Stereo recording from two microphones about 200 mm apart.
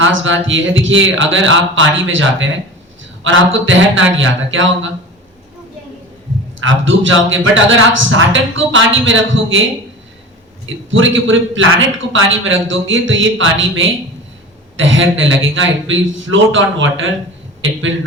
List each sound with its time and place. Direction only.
0.0 s a man's voice: 70° right (ahead or behind)
6.6 s a man's voice: 70° right (ahead or behind)
10.9 s a man's voice: 70° right (ahead or behind)